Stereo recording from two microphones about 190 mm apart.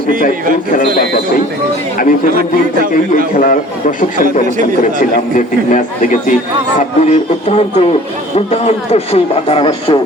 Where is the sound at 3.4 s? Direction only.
45° left (ahead or behind).